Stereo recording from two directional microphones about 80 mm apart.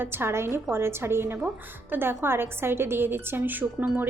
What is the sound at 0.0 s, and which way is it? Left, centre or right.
A woman's voice, right.